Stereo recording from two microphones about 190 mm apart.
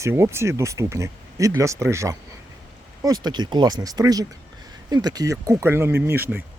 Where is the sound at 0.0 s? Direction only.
15° right (ahead or behind).